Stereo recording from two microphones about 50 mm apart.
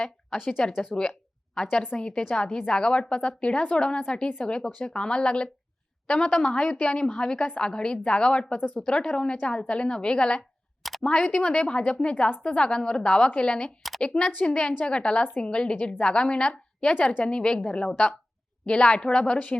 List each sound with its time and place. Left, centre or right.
0.0 s a woman's voice: centre
1.7 s a woman's voice: left
2.0 s a woman's voice: centre
8.5 s speech: left
8.8 s a woman's voice: centre